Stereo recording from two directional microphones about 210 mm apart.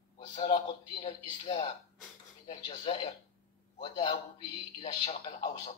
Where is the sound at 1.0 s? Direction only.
25° left (ahead or behind).